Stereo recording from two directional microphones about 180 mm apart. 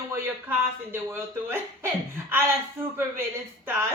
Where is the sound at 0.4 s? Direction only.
10° right (ahead or behind).